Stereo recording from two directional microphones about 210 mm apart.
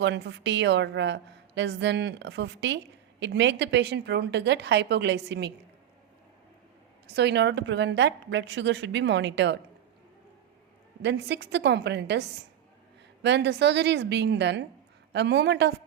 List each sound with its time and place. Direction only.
0.0 s a woman's voice: 55° right (ahead or behind)
7.1 s a woman's voice: 55° right (ahead or behind)
11.0 s a woman's voice: 55° right (ahead or behind)
13.2 s a woman's voice: 55° right (ahead or behind)